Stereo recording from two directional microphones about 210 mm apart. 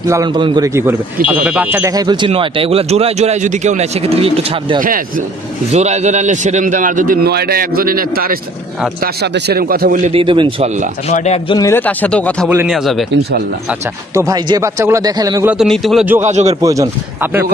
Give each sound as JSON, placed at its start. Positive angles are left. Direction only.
{"t": 0.1, "sound": "speech", "side_deg": -20}
{"t": 4.7, "sound": "a man's voice", "side_deg": -40}
{"t": 10.1, "sound": "speech", "side_deg": -25}
{"t": 11.1, "sound": "a man's voice", "side_deg": 30}
{"t": 12.4, "sound": "a man's voice", "side_deg": -5}
{"t": 13.7, "sound": "speech", "side_deg": -15}
{"t": 15.5, "sound": "a man's voice", "side_deg": 0}
{"t": 16.2, "sound": "a man's voice", "side_deg": -35}
{"t": 16.6, "sound": "speech", "side_deg": -15}